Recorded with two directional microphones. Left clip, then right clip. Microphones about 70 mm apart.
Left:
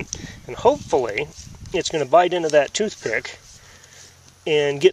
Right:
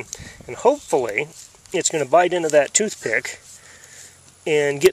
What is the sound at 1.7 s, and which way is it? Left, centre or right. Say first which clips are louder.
Speech: even; right.